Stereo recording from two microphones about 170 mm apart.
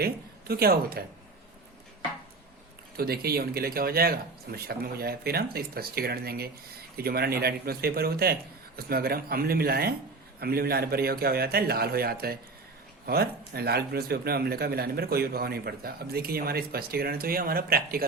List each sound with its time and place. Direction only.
0.0 s speech: 65° right (ahead or behind)
3.0 s speech: 65° right (ahead or behind)